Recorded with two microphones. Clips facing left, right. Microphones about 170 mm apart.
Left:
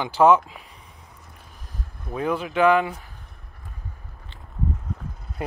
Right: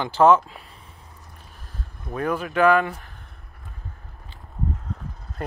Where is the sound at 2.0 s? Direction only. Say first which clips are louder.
Even; 10° left (ahead or behind).